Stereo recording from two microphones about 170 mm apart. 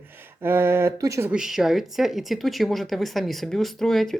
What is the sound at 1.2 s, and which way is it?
Speech, 5° right (ahead or behind).